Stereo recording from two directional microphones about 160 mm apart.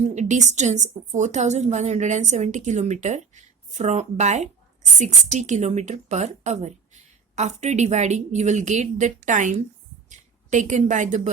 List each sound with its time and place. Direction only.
0.0 s a woman's voice: 45° right (ahead or behind)